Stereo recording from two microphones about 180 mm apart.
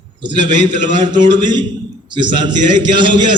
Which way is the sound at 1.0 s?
25° right (ahead or behind).